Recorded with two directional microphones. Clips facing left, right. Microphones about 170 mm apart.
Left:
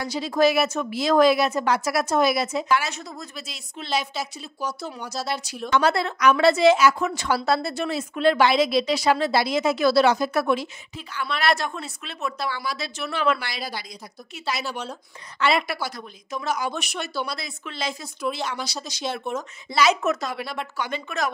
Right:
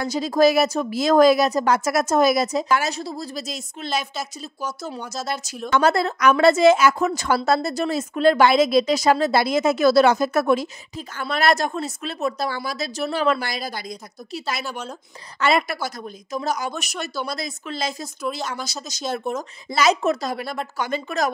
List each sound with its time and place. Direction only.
0.0 s a woman's voice: 45° right (ahead or behind)